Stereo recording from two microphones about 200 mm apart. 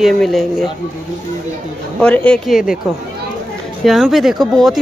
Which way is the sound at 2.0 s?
5° left (ahead or behind).